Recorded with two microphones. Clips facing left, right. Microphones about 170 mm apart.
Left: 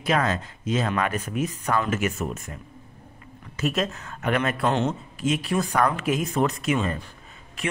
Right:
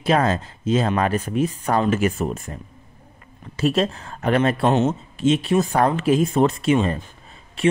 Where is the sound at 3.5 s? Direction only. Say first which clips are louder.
Right 6 dB; 30° right (ahead or behind).